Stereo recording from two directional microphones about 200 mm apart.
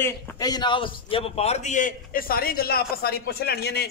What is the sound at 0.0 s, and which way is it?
A man's voice, 15° left (ahead or behind).